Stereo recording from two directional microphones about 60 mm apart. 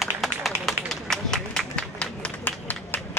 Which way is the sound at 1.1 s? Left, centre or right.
Centre.